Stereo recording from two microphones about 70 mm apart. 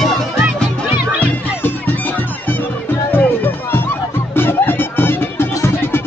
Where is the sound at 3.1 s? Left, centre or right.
Left.